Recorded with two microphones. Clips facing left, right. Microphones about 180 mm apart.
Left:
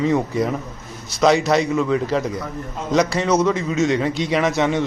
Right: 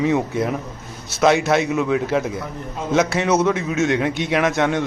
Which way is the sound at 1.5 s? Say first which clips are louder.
Even; centre (ahead or behind).